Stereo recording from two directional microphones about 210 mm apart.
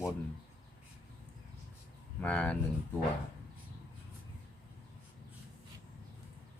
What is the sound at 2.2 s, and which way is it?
Speech, 5° left (ahead or behind).